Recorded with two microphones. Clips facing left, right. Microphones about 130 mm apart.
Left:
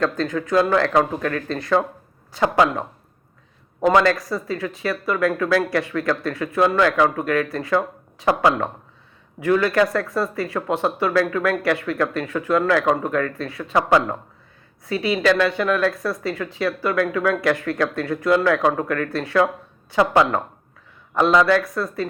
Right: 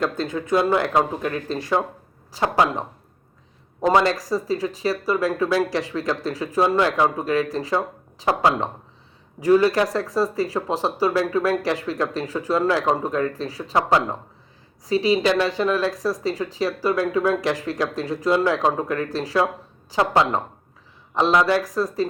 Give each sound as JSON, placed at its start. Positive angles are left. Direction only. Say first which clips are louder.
{"t": 0.0, "sound": "speech", "louder": "left 2 dB", "side_deg": -25}
{"t": 3.8, "sound": "speech", "louder": "left 2 dB", "side_deg": -30}
{"t": 5.5, "sound": "speech", "louder": "left 2 dB", "side_deg": -20}
{"t": 18.3, "sound": "speech", "louder": "left 2 dB", "side_deg": -20}